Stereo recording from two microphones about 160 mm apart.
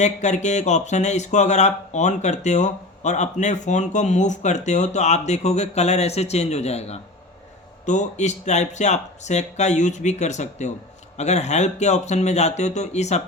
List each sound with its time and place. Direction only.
0.0 s speech: 45° left (ahead or behind)